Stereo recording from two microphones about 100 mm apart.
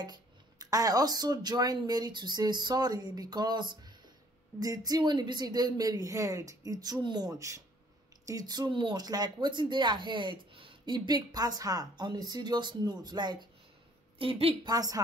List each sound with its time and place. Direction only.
0.0 s a woman's voice: 40° right (ahead or behind)
14.1 s a woman's voice: 70° right (ahead or behind)
14.7 s a woman's voice: 40° right (ahead or behind)